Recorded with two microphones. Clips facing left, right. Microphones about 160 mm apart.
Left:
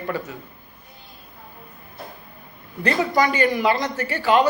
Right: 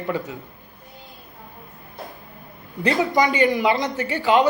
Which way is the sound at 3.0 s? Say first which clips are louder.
Right 1 dB; 20° right (ahead or behind).